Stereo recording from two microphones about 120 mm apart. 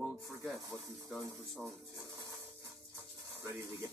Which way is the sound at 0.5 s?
30° right (ahead or behind).